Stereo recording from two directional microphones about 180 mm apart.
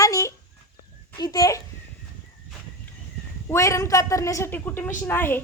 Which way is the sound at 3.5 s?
15° left (ahead or behind).